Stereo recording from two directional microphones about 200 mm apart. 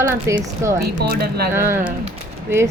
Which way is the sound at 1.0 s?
50° right (ahead or behind).